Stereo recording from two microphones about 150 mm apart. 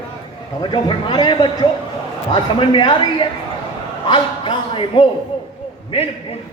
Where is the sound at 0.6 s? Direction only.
30° left (ahead or behind).